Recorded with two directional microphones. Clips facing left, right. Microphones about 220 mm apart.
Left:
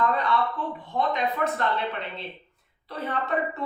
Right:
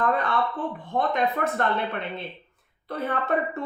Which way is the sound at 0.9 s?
50° right (ahead or behind).